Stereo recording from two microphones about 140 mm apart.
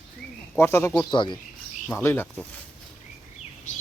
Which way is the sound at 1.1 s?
35° left (ahead or behind).